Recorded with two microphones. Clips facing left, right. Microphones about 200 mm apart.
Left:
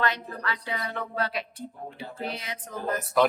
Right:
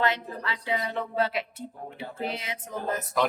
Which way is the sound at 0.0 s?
25° right (ahead or behind).